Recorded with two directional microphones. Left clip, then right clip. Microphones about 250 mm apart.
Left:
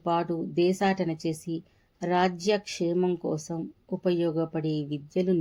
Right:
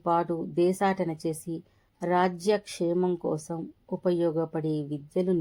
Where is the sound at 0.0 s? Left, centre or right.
Centre.